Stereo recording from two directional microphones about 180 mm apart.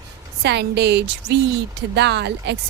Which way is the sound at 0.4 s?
70° right (ahead or behind).